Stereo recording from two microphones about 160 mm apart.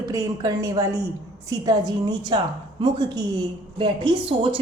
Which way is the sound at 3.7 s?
30° right (ahead or behind).